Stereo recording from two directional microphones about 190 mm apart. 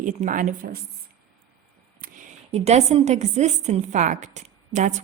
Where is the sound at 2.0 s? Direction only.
50° right (ahead or behind).